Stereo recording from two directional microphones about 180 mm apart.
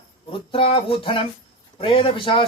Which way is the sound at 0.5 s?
30° left (ahead or behind).